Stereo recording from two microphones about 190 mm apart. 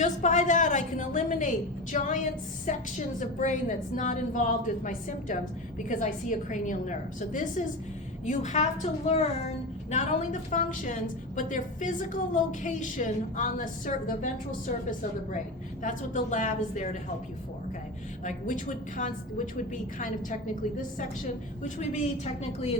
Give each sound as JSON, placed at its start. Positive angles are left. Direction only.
{"t": 0.0, "sound": "a woman's voice", "side_deg": 40}
{"t": 18.3, "sound": "a woman's voice", "side_deg": 40}
{"t": 21.6, "sound": "a woman's voice", "side_deg": 40}